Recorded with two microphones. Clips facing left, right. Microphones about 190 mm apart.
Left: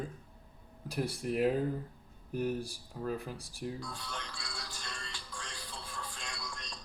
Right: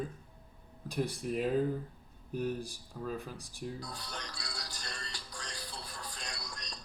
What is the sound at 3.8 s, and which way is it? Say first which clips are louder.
Music: left 1 dB; 40° right (ahead or behind).